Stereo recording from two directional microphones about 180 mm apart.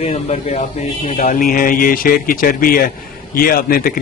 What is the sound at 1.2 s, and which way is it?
Speech, 50° left (ahead or behind).